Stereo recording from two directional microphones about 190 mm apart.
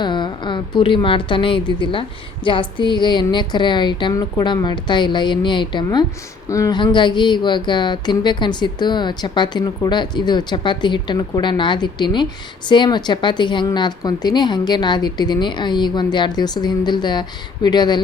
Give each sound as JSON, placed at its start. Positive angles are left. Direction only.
{"t": 0.0, "sound": "speech", "side_deg": 25}